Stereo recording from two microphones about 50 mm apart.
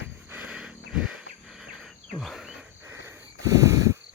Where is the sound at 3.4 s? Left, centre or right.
Right.